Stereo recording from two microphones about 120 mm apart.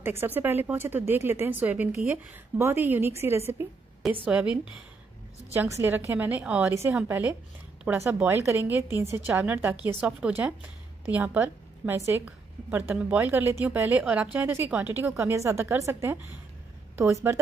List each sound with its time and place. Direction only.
0.0 s a woman's voice: 20° right (ahead or behind)
6.7 s a woman's voice: 20° right (ahead or behind)